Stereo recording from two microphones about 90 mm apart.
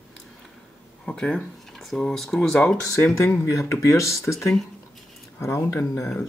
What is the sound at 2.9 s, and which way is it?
Speech, 35° left (ahead or behind).